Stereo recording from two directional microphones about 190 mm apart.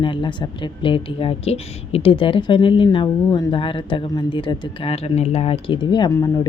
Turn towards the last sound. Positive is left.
turn(degrees=20)  # may be behind; listen again after turning